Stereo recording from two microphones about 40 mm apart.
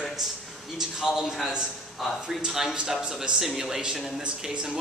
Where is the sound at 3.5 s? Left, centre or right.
Centre.